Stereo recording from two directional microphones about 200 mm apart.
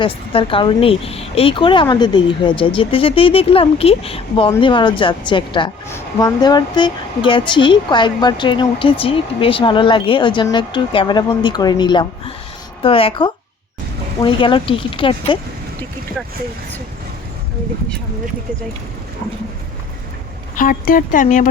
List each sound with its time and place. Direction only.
0.0 s speech: 25° left (ahead or behind)
20.6 s speech: 45° left (ahead or behind)